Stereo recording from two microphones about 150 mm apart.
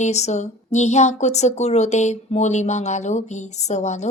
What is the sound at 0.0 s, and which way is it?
Speech, 50° left (ahead or behind).